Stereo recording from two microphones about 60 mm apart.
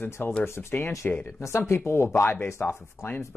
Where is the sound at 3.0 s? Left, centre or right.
Left.